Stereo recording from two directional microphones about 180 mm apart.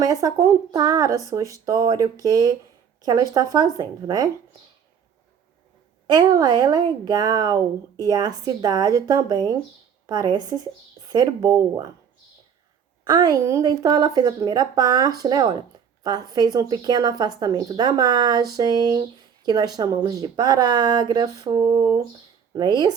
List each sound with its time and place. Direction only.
0.0 s speech: 20° right (ahead or behind)
6.1 s speech: 20° right (ahead or behind)
13.1 s speech: 20° right (ahead or behind)